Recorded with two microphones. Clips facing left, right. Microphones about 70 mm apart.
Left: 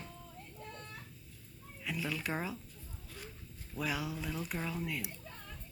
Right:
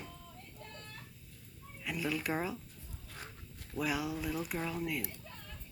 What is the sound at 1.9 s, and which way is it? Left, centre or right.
Speech, centre.